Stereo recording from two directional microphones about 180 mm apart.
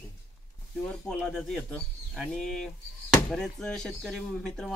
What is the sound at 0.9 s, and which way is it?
Speech, 5° left (ahead or behind).